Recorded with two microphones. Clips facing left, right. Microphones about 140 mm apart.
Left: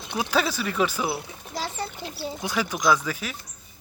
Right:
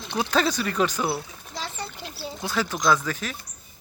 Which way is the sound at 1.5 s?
10° left (ahead or behind).